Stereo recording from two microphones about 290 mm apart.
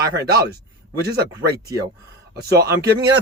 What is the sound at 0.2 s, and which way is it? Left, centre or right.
Speech, right.